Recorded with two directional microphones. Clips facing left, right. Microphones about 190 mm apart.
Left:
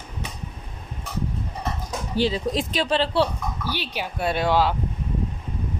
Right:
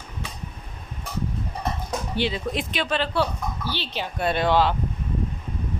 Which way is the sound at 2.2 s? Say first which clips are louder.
Left 4 dB; 40° left (ahead or behind).